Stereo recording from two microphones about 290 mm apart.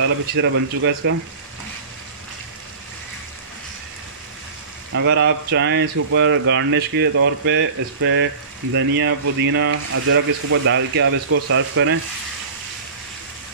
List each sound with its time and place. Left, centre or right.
0.0 s speech: right
4.9 s speech: right